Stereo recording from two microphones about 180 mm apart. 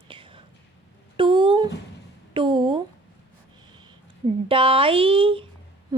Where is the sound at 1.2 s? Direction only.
25° right (ahead or behind).